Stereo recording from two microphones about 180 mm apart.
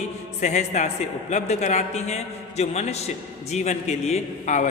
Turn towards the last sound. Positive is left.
turn(degrees=40)  # may be behind; listen again after turning